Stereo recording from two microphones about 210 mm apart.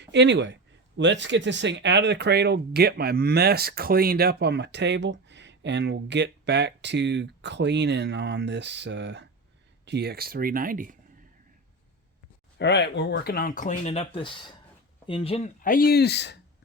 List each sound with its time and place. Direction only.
0.0 s speech: 55° right (ahead or behind); by 10.9 s 40° right (ahead or behind)
12.5 s speech: 55° left (ahead or behind)